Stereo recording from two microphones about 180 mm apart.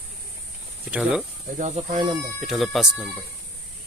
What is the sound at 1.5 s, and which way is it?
Speech, 40° right (ahead or behind).